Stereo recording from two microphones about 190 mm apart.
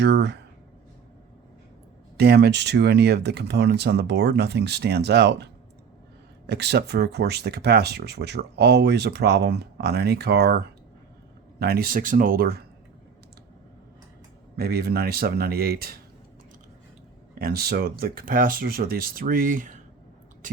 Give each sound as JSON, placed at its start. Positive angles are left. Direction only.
{"t": 0.0, "sound": "speech", "side_deg": -65}
{"t": 2.1, "sound": "speech", "side_deg": -55}
{"t": 6.5, "sound": "speech", "side_deg": -60}
{"t": 14.5, "sound": "speech", "side_deg": -55}
{"t": 17.3, "sound": "speech", "side_deg": -55}